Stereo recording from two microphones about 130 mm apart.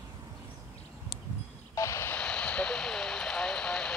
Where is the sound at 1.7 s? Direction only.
25° left (ahead or behind).